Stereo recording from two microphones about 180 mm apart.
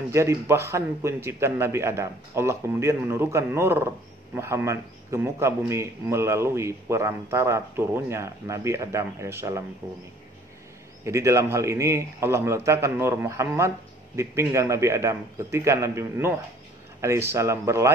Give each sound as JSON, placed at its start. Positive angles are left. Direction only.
{"t": 0.1, "sound": "a man's voice", "side_deg": -15}
{"t": 11.1, "sound": "a man's voice", "side_deg": -15}